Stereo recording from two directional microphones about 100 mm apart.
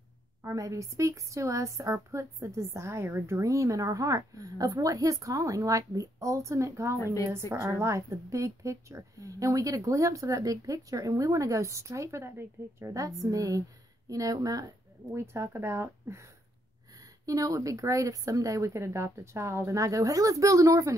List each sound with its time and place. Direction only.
0.4 s a woman's voice: 30° right (ahead or behind)
15.1 s speech: 25° right (ahead or behind)
17.3 s a woman's voice: 35° right (ahead or behind)